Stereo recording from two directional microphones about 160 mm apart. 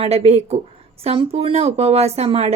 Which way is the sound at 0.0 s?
40° right (ahead or behind).